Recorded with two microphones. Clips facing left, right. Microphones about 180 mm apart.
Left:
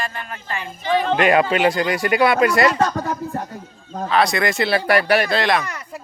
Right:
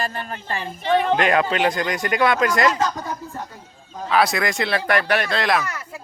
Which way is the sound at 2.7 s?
60° left (ahead or behind).